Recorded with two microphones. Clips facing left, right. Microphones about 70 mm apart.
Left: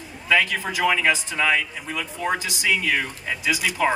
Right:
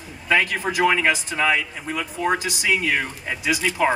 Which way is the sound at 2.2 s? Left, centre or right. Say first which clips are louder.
Right 2 dB; centre.